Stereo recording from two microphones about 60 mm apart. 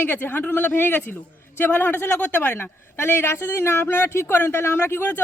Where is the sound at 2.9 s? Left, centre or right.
Left.